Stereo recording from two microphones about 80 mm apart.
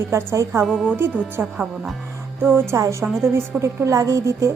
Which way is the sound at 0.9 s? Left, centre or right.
Right.